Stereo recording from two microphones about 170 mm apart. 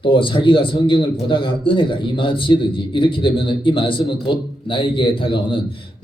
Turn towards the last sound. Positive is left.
turn(degrees=30)  # may be behind; listen again after turning